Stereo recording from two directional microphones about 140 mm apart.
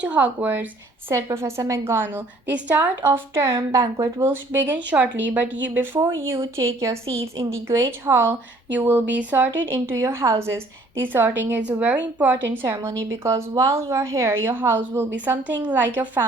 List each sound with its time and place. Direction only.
0.0 s a woman's voice: 10° right (ahead or behind)
3.1 s a woman's voice: 25° right (ahead or behind)